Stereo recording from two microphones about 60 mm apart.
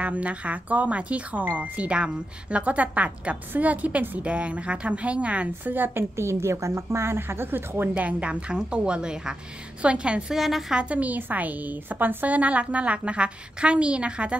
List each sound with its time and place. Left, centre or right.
0.0 s speech: right
5.8 s a woman's voice: right
7.9 s a woman's voice: right
10.3 s a woman's voice: centre
10.8 s speech: right